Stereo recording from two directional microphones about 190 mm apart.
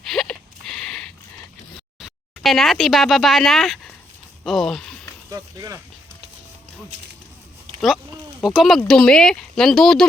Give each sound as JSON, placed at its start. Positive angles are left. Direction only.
{"t": 0.0, "sound": "a sound", "side_deg": 0}
{"t": 2.0, "sound": "speech", "side_deg": 0}
{"t": 5.3, "sound": "speech", "side_deg": -15}
{"t": 8.4, "sound": "speech", "side_deg": 0}